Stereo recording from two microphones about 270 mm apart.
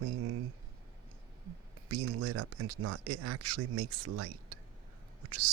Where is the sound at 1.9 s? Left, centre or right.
Right.